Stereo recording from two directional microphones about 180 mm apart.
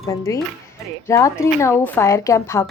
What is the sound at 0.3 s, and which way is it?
A woman's voice, 20° left (ahead or behind).